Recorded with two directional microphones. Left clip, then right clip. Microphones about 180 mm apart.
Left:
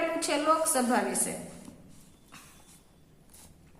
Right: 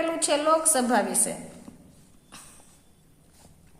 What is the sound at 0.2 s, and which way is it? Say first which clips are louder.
A woman's voice: right 5 dB; 35° right (ahead or behind).